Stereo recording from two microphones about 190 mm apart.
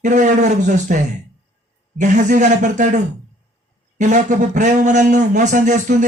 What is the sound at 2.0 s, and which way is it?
Speech, 40° right (ahead or behind).